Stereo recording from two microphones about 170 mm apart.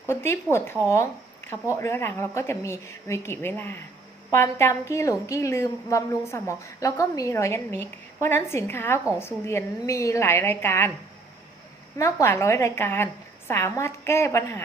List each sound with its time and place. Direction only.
0.1 s a woman's voice: 15° left (ahead or behind)
11.9 s a woman's voice: 15° left (ahead or behind)